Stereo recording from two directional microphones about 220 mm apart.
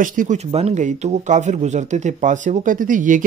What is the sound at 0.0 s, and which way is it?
Speech, 35° right (ahead or behind).